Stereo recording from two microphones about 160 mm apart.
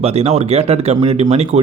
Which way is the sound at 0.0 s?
40° right (ahead or behind).